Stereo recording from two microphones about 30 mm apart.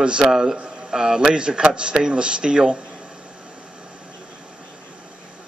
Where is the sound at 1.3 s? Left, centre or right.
Right.